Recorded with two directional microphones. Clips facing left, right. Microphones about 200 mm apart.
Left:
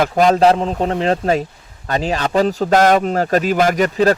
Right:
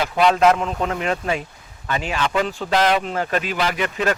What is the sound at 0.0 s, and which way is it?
Speech, 40° left (ahead or behind).